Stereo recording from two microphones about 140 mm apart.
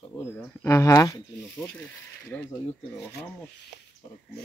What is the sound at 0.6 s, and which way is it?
Speech, 20° left (ahead or behind).